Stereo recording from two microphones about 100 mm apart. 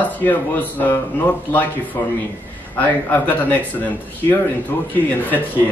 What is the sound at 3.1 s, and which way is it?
Speech, 20° left (ahead or behind).